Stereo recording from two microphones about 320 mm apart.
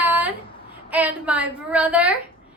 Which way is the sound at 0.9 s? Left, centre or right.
Centre.